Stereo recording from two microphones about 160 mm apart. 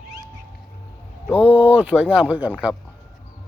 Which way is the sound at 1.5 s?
10° right (ahead or behind).